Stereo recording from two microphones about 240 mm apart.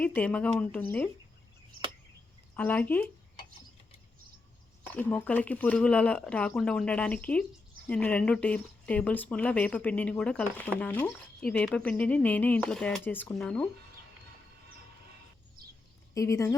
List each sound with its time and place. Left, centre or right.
0.0 s speech: centre
2.6 s speech: centre
4.9 s speech: centre
16.1 s speech: centre